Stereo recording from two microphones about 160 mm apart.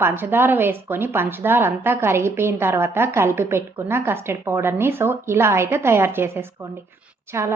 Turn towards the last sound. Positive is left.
turn(degrees=-15)  # may be behind; listen again after turning